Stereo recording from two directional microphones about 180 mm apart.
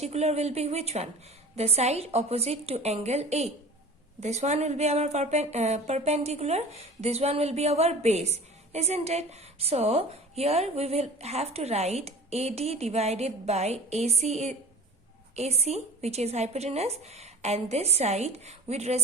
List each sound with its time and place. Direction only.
0.0 s speech: 35° right (ahead or behind)